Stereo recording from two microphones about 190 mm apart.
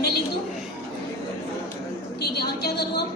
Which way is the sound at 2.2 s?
55° left (ahead or behind).